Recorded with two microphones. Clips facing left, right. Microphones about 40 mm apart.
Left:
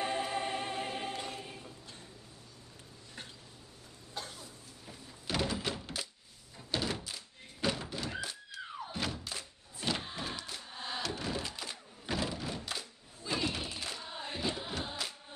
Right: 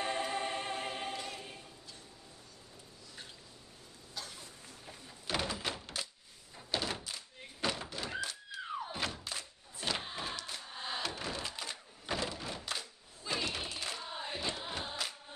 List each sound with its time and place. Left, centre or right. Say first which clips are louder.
0.0 s music: left 1 dB; centre
1.1 s choir: left 1 dB; centre
1.4 s choir: left 2 dB; centre
4.2 s a sound: left 3 dB; left
4.8 s door: left 1 dB; centre
6.5 s thunk: left 1 dB; centre
10.4 s a sound: even; centre